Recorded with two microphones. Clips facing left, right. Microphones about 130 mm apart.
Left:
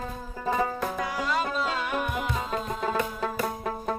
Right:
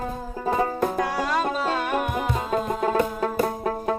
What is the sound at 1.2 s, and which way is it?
Music, 45° right (ahead or behind).